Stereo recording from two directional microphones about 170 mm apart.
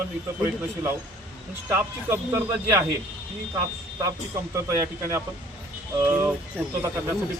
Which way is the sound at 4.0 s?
20° right (ahead or behind).